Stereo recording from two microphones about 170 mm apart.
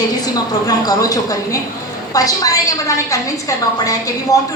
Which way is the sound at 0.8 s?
20° left (ahead or behind).